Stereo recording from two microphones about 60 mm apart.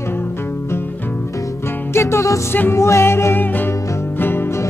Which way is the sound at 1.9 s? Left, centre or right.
Left.